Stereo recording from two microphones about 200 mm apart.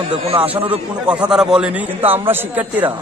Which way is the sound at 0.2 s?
30° right (ahead or behind).